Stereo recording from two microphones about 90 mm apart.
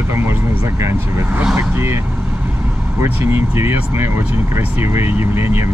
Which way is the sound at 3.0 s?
25° right (ahead or behind).